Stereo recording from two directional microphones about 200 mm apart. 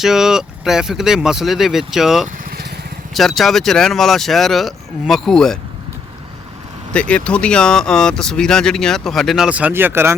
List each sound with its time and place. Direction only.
0.0 s speech: centre (ahead or behind)
2.2 s vehicle: 50° right (ahead or behind)
3.2 s speech: centre (ahead or behind)
6.9 s speech: 5° left (ahead or behind); by 10.2 s 10° right (ahead or behind)